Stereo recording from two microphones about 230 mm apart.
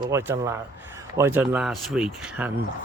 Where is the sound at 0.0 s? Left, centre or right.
Centre.